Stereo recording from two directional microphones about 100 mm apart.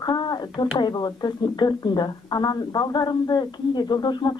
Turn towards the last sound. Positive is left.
turn(degrees=45)  # may be behind; listen again after turning